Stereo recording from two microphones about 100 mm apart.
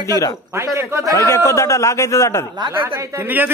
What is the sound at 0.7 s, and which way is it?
Speech, 30° right (ahead or behind).